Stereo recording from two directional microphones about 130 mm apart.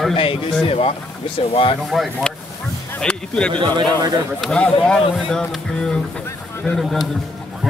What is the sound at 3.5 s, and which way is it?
Speech, 35° right (ahead or behind).